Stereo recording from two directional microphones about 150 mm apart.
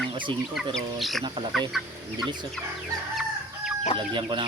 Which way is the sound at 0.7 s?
Centre (ahead or behind).